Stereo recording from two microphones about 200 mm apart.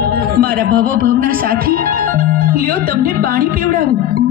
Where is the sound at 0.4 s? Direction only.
50° right (ahead or behind).